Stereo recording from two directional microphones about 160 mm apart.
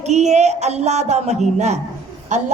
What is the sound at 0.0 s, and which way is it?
Child singing, 45° right (ahead or behind).